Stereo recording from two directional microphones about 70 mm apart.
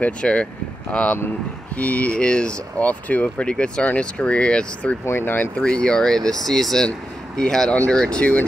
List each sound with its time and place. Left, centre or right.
0.0 s speech: centre
5.0 s speech: left
5.6 s speech: centre
7.7 s speech: left